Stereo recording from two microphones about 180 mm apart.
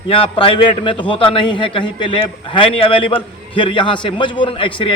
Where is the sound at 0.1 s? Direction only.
30° left (ahead or behind).